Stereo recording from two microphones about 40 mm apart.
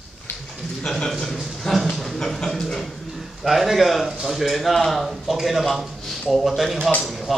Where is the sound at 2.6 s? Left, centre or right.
Centre.